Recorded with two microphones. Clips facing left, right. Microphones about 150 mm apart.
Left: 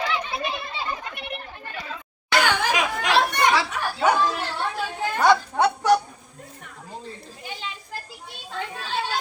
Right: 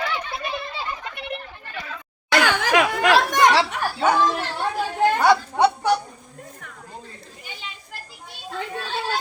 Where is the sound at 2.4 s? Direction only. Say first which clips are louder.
Right 4 dB; 75° right (ahead or behind).